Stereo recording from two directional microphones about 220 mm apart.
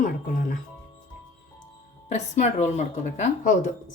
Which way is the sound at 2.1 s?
30° left (ahead or behind).